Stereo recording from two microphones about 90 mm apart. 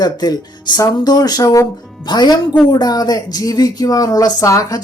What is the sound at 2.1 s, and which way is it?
Speech, 50° left (ahead or behind).